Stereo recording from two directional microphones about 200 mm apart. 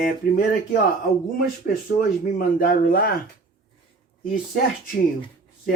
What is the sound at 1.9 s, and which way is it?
Speech, 45° left (ahead or behind).